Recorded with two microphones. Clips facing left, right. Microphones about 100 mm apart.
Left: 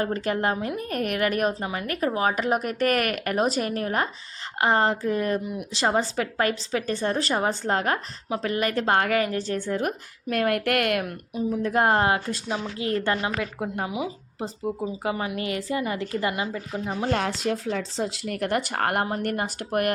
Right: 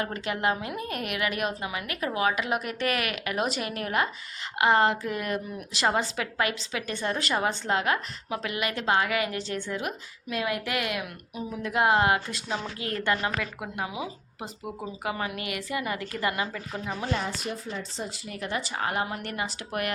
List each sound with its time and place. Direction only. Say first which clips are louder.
0.0 s a woman's voice: left 3 dB; 40° left (ahead or behind); by 11.0 s 55° left (ahead or behind)
11.3 s a woman's voice: left 4 dB; 40° left (ahead or behind)
17.1 s speech: left 7 dB; 80° left; by 19.0 s 60° left (ahead or behind)
19.0 s a woman's voice: left 6 dB; 45° left (ahead or behind)